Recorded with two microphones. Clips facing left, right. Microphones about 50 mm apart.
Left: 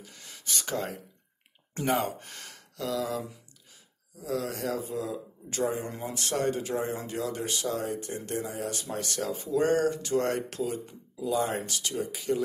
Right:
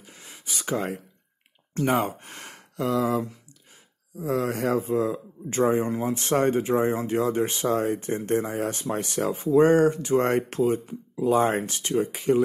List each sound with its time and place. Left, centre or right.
0.0 s a sound: centre
1.9 s speech: centre
4.2 s speech: right
5.9 s speech: centre
6.3 s speech: right